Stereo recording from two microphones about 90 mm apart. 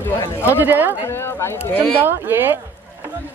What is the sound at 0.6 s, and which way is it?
Speech, 20° right (ahead or behind).